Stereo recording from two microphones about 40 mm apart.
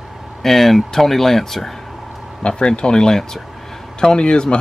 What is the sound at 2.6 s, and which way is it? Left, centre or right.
Speech, left.